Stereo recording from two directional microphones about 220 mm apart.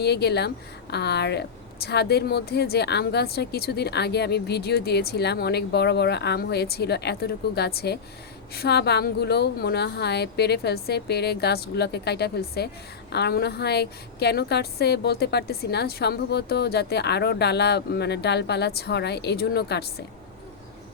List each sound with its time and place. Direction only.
0.0 s a woman's voice: 50° left (ahead or behind)